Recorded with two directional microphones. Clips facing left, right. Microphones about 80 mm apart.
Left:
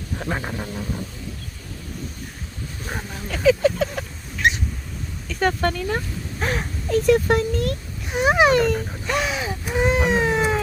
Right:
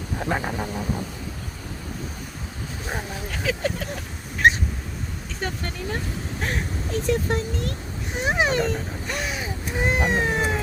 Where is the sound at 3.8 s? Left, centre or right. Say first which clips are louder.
Left 8 dB; left.